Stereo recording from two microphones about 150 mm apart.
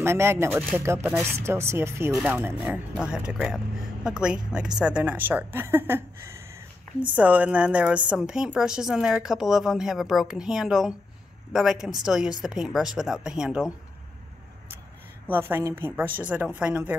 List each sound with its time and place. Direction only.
0.0 s a woman's voice: 15° right (ahead or behind)
15.2 s speech: 15° right (ahead or behind)